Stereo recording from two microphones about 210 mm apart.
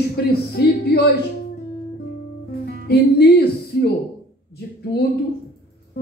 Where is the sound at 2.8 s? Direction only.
50° left (ahead or behind).